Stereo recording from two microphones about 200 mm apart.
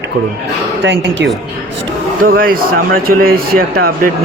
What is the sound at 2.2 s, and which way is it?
Speech, 45° right (ahead or behind).